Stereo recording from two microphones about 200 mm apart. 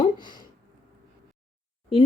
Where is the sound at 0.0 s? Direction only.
20° left (ahead or behind).